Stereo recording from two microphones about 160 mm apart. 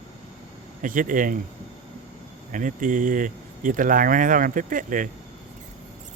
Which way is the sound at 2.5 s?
55° right (ahead or behind).